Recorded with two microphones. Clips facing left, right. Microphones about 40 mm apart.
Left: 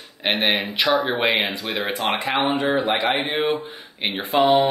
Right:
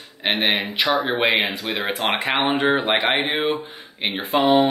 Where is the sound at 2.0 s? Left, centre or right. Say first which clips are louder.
Even; right.